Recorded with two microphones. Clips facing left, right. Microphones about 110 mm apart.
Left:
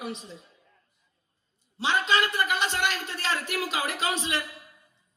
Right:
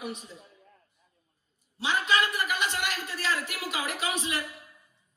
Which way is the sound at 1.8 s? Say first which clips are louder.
Left 2 dB; 30° left (ahead or behind).